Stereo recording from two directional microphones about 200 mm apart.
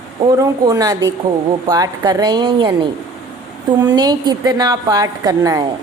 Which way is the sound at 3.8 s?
20° right (ahead or behind).